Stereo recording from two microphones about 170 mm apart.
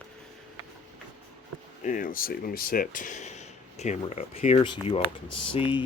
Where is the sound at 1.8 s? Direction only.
50° left (ahead or behind); by 5.8 s 30° left (ahead or behind).